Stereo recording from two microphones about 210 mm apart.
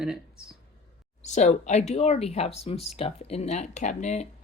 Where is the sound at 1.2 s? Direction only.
35° left (ahead or behind).